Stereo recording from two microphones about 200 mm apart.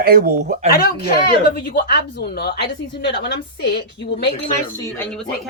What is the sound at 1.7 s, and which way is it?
A woman's voice, 50° left (ahead or behind).